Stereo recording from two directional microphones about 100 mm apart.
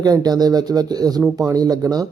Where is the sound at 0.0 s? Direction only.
40° right (ahead or behind).